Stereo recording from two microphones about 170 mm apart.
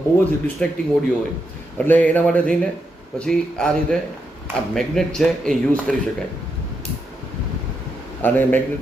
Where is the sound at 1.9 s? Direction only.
10° left (ahead or behind).